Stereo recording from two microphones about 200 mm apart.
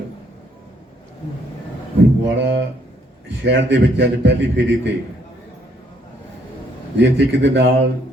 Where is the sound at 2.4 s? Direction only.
65° right (ahead or behind).